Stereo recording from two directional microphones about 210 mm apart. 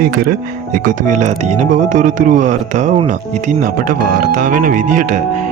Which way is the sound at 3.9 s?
35° right (ahead or behind).